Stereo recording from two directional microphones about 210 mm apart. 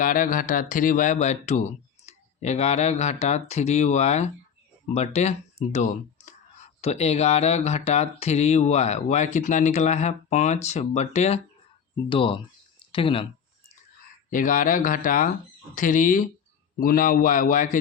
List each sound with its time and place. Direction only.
0.0 s speech: 40° left (ahead or behind); by 13.2 s 25° left (ahead or behind)
14.3 s speech: 40° left (ahead or behind)